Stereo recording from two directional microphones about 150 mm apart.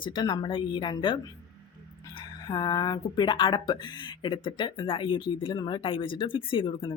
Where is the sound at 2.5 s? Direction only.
25° left (ahead or behind).